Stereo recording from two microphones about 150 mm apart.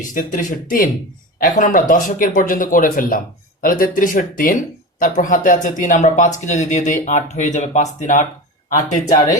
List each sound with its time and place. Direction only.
0.1 s speech: 65° left (ahead or behind)